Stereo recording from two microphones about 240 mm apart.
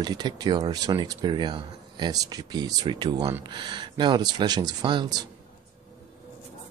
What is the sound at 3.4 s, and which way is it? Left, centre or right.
Speech, centre.